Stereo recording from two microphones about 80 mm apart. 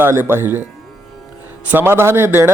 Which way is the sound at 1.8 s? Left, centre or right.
Right.